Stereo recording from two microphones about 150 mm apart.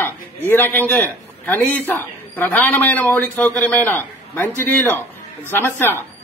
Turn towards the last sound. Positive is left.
turn(degrees=15)  # may be behind; listen again after turning